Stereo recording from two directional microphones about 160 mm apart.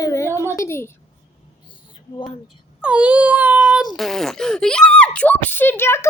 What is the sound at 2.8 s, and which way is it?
Speech, 5° right (ahead or behind).